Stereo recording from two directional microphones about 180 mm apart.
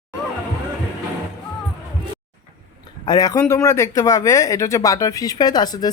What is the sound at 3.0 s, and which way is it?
Speech, 20° left (ahead or behind).